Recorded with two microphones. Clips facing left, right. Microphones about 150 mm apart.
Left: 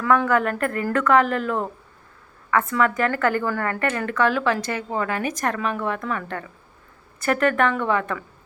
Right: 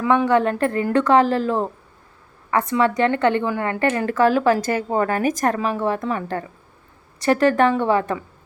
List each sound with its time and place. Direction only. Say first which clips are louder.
0.0 s a woman's voice: right 2 dB; 15° right (ahead or behind)
0.3 s a woman's voice: right 4 dB; 30° right (ahead or behind)
5.5 s a woman's voice: right 4 dB; 30° right (ahead or behind)